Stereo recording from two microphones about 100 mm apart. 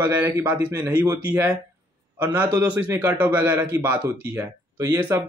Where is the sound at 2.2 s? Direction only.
20° right (ahead or behind).